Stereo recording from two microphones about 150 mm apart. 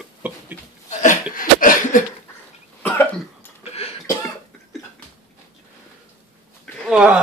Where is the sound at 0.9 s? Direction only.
55° left (ahead or behind).